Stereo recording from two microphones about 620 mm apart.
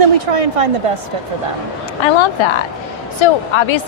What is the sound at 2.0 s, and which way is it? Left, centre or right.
Speech, left.